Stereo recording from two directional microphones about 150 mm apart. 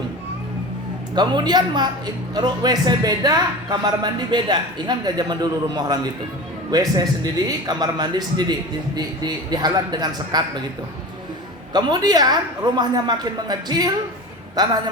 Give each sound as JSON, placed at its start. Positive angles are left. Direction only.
{"t": 1.1, "sound": "a woman's voice", "side_deg": -30}
{"t": 11.7, "sound": "a woman's voice", "side_deg": -30}